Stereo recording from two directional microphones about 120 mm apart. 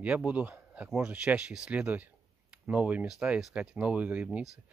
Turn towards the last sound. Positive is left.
turn(degrees=-10)  # may be behind; listen again after turning